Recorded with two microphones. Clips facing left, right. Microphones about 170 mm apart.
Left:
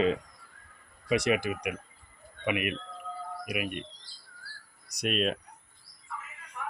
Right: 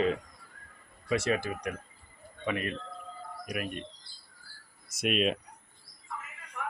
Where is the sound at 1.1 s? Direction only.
15° left (ahead or behind).